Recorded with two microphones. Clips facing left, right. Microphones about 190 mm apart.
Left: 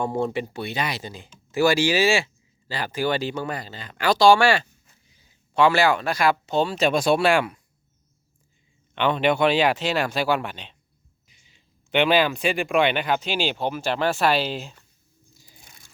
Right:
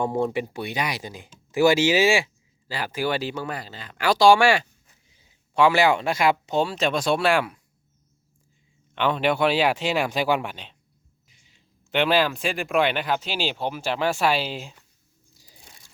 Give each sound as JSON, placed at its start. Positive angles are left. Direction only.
{"t": 0.0, "sound": "speech", "side_deg": -15}
{"t": 6.7, "sound": "speech", "side_deg": 5}
{"t": 9.0, "sound": "speech", "side_deg": -5}
{"t": 11.9, "sound": "speech", "side_deg": 0}
{"t": 15.4, "sound": "crunch", "side_deg": -35}